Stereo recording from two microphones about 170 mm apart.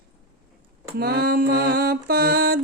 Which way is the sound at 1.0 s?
65° right (ahead or behind).